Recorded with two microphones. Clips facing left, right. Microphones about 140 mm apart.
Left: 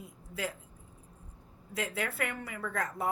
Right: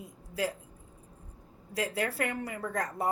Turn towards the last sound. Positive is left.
turn(degrees=-40)  # may be behind; listen again after turning